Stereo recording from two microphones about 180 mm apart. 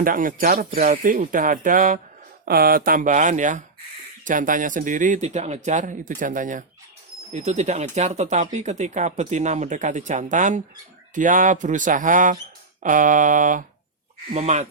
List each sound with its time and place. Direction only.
0.0 s a man's voice: 50° right (ahead or behind)